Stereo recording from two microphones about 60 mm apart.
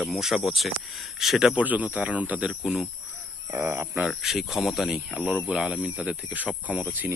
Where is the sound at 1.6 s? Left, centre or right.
Right.